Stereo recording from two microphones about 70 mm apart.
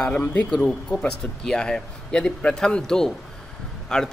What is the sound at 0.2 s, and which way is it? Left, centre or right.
Speech, left.